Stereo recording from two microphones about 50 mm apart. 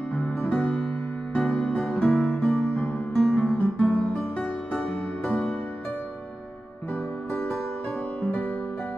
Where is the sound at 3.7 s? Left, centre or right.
Left.